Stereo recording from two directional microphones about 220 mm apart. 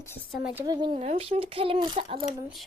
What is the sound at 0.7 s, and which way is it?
Speech, 20° right (ahead or behind).